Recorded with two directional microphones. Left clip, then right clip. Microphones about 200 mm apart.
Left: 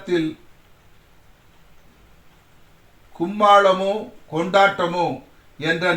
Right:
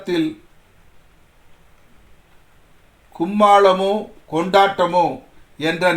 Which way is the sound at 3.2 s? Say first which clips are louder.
Right 2 dB; 50° right (ahead or behind).